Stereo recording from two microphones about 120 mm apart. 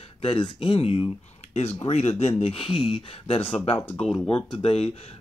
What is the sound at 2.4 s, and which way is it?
Speech, 50° left (ahead or behind).